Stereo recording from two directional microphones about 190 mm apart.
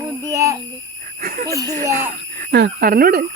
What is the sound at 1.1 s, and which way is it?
Speech, 50° right (ahead or behind).